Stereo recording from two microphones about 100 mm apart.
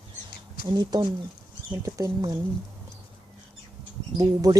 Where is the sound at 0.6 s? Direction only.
45° right (ahead or behind).